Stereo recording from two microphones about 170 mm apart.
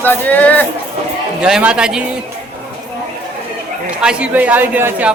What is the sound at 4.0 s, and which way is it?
A man's voice, 5° right (ahead or behind).